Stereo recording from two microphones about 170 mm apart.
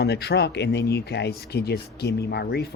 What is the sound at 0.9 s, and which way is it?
Speech, 70° left (ahead or behind).